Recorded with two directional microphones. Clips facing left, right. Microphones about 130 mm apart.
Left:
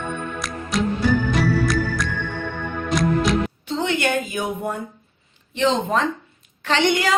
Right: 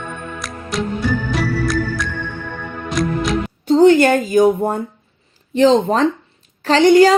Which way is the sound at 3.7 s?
40° right (ahead or behind).